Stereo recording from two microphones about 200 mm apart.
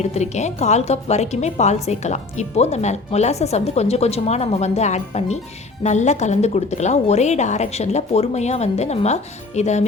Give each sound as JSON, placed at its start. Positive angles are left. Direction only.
{"t": 0.0, "sound": "a woman's voice", "side_deg": 35}